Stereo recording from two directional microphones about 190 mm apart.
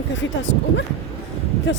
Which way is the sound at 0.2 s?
75° left (ahead or behind).